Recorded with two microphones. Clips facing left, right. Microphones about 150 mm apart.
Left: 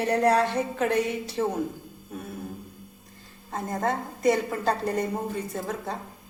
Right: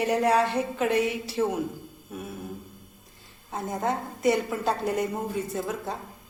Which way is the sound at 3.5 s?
5° right (ahead or behind).